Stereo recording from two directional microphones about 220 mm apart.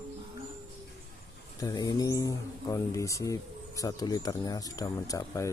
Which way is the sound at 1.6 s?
15° left (ahead or behind).